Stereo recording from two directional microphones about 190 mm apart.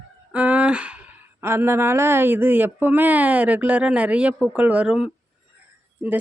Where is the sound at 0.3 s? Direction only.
5° right (ahead or behind).